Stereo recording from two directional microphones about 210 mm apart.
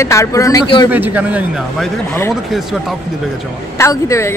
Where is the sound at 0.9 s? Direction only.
10° right (ahead or behind).